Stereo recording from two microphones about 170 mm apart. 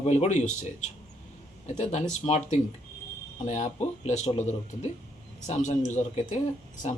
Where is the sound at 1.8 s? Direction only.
40° left (ahead or behind).